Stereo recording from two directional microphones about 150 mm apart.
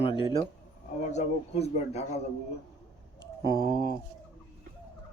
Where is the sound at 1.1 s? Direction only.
45° left (ahead or behind).